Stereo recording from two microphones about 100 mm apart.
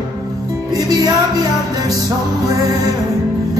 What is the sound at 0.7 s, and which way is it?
Music, 35° right (ahead or behind).